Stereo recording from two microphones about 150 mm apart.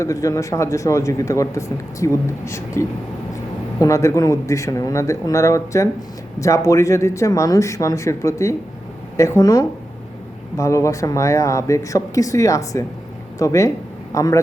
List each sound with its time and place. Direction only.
0.0 s speech: 20° left (ahead or behind)